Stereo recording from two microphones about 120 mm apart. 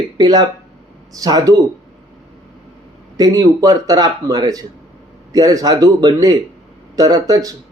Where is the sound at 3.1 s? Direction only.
35° right (ahead or behind).